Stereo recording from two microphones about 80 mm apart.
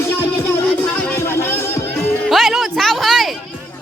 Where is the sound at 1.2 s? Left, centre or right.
Left.